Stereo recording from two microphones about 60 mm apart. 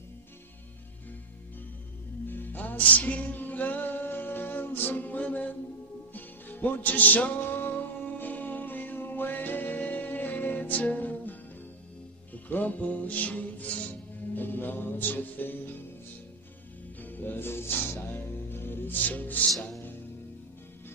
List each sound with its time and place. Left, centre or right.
2.2 s music: left
12.4 s music: left
17.0 s music: left